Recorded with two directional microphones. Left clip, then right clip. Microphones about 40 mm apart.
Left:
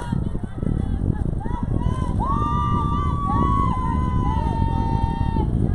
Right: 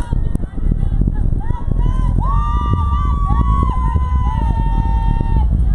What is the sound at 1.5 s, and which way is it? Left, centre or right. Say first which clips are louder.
Run: left 1 dB; right.